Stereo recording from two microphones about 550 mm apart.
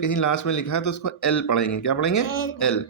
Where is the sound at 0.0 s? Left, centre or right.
Left.